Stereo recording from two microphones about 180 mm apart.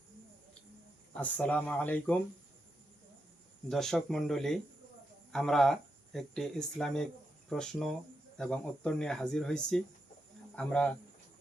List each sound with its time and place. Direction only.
1.2 s speech: 10° left (ahead or behind)
3.7 s speech: 5° left (ahead or behind)